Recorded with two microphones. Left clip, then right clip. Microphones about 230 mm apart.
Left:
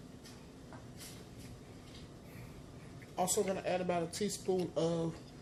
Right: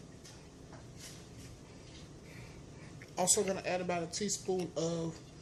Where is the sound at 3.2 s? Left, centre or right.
Centre.